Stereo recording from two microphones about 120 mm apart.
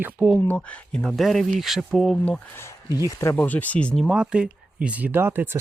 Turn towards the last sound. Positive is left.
turn(degrees=-20)  # may be behind; listen again after turning